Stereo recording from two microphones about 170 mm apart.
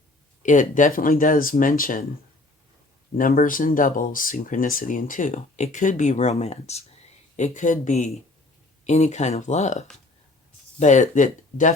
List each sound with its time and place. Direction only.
0.4 s speech: 50° left (ahead or behind)
3.2 s speech: 55° left (ahead or behind)